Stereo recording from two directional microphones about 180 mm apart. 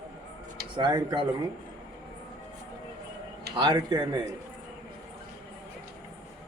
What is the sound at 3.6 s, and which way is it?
Speech, 25° right (ahead or behind).